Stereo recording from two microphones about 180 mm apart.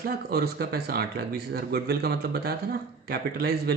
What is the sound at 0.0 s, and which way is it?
Speech, 60° right (ahead or behind).